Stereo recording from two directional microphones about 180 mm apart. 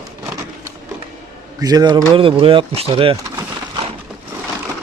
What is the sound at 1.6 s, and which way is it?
Speech, 20° right (ahead or behind).